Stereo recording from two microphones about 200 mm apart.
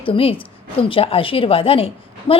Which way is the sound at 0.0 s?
25° left (ahead or behind).